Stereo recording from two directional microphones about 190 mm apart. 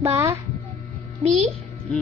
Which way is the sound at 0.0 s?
15° right (ahead or behind).